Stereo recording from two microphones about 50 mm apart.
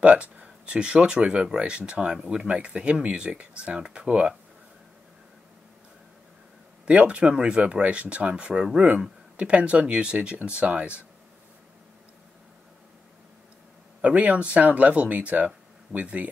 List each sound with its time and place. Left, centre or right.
0.0 s speech: right
6.9 s speech: right
14.0 s speech: right